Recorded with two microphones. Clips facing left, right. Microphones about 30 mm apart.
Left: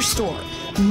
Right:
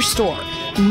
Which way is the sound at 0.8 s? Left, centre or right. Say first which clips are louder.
Right 2 dB; right.